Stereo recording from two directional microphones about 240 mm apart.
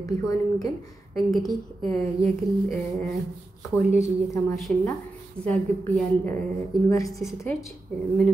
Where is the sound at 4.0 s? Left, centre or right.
Centre.